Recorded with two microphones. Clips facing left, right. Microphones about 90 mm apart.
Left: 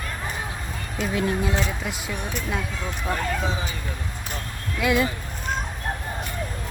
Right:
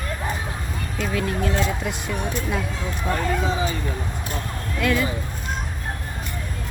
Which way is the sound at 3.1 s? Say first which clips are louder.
Right 2 dB; centre (ahead or behind).